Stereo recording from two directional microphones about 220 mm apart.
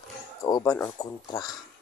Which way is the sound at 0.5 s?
15° left (ahead or behind).